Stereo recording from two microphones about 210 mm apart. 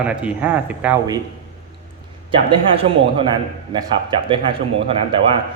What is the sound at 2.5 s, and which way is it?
Speech, 25° right (ahead or behind).